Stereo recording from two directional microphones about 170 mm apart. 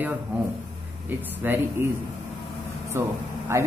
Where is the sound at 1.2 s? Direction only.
10° right (ahead or behind).